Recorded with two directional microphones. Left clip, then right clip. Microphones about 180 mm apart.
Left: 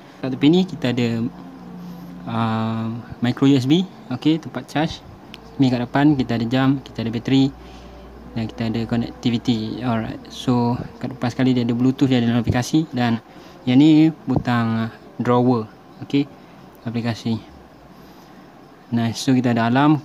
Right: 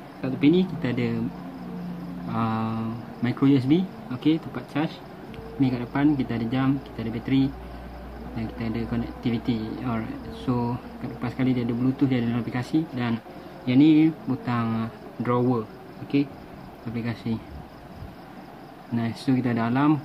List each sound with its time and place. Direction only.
0.2 s speech: 65° left (ahead or behind)
2.2 s speech: 55° left (ahead or behind)
16.9 s speech: 60° left (ahead or behind)
18.9 s speech: 55° left (ahead or behind)